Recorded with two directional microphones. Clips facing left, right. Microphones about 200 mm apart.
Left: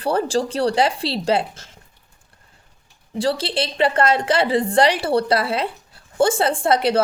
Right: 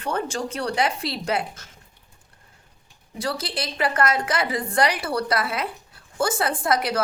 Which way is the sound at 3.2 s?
30° left (ahead or behind).